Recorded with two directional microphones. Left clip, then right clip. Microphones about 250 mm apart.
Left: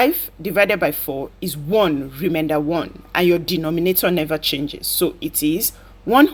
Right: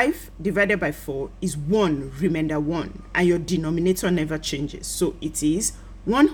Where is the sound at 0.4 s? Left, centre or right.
Centre.